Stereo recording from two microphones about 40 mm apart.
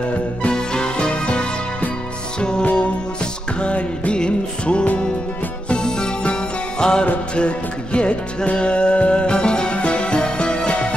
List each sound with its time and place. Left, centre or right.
0.5 s music: left
2.6 s music: left